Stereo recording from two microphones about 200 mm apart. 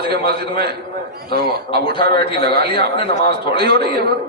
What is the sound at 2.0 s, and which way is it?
A man's voice, 55° right (ahead or behind).